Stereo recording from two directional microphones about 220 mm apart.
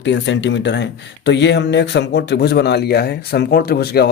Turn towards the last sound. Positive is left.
turn(degrees=45)  # may be behind; listen again after turning